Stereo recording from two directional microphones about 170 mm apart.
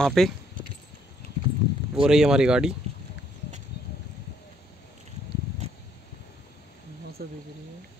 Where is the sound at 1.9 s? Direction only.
5° right (ahead or behind).